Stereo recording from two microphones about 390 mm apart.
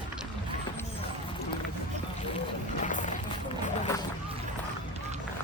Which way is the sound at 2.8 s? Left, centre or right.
Centre.